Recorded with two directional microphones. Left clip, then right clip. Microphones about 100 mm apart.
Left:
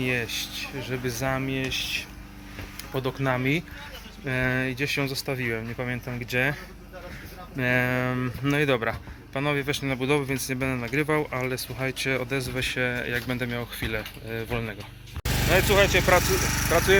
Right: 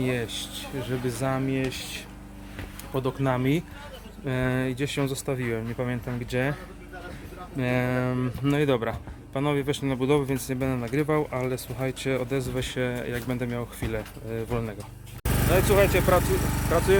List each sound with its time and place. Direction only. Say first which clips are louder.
0.0 s speech: left 2 dB; 25° right (ahead or behind)
0.5 s speech: left 1 dB; 40° right (ahead or behind)
1.0 s speech: left 1 dB; 25° right (ahead or behind)
2.9 s speech: even; 25° right (ahead or behind)
7.6 s speech: left 3 dB; 10° right (ahead or behind); by 11.0 s 25° right (ahead or behind)
11.0 s speech: even; 15° right (ahead or behind); by 12.9 s 30° right (ahead or behind)
12.9 s speech: left 3 dB; 15° right (ahead or behind)
15.2 s vehicle: left 1 dB; 50° right (ahead or behind)
15.6 s speech: even; 15° right (ahead or behind)
16.2 s speech: left 3 dB; 35° right (ahead or behind)
16.6 s speech: left 1 dB; 20° left (ahead or behind)